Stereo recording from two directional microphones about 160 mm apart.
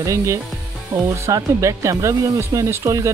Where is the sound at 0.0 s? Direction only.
20° right (ahead or behind).